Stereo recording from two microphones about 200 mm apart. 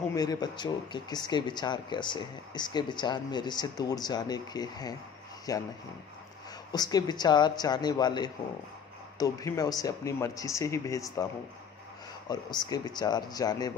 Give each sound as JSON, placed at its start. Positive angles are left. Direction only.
{"t": 0.1, "sound": "speech", "side_deg": 20}
{"t": 6.7, "sound": "speech", "side_deg": 20}
{"t": 12.3, "sound": "speech", "side_deg": 20}